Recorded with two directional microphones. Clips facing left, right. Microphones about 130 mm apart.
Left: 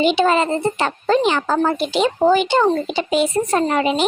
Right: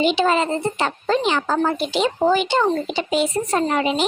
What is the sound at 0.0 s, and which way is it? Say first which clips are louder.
A woman's voice: left 2 dB; 55° left (ahead or behind).